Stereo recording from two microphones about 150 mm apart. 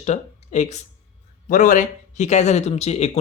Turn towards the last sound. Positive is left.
turn(degrees=45)  # may be behind; listen again after turning